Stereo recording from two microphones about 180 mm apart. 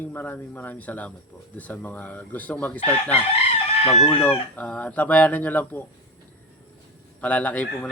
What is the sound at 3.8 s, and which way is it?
Chicken, 35° left (ahead or behind).